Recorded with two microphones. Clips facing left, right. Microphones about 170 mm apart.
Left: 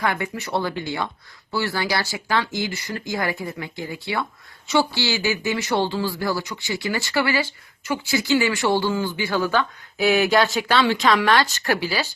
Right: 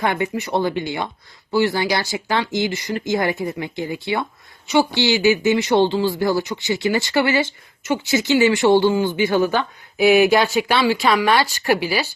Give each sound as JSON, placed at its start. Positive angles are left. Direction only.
{"t": 0.0, "sound": "speech", "side_deg": -20}